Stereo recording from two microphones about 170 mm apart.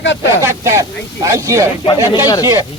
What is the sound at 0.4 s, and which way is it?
Speech, 15° right (ahead or behind).